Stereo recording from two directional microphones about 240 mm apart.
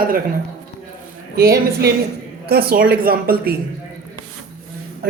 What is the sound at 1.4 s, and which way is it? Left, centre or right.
Speech, right.